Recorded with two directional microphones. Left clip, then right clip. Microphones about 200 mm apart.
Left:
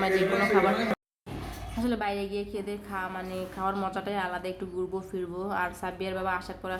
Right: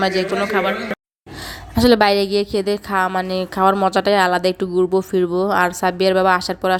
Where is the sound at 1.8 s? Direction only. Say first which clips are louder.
Right 17 dB; 50° right (ahead or behind).